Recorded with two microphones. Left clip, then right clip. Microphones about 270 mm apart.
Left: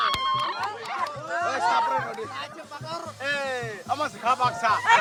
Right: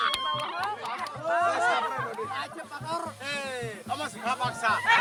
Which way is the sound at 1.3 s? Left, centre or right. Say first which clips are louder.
Right 2 dB; centre.